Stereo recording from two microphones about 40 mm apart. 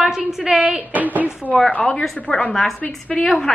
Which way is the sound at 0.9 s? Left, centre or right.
Right.